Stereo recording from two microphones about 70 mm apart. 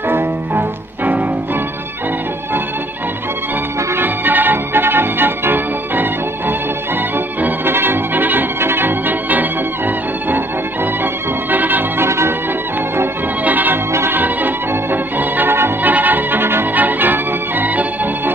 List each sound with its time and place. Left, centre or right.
0.1 s music: right
3.9 s music: right
7.4 s organ: right
11.5 s music: right
12.1 s music: right
12.9 s music: right